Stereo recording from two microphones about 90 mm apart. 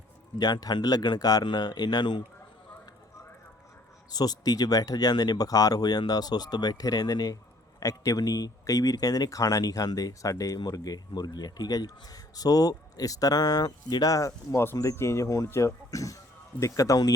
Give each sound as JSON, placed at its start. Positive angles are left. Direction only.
{"t": 0.3, "sound": "speech", "side_deg": 50}
{"t": 4.1, "sound": "speech", "side_deg": 45}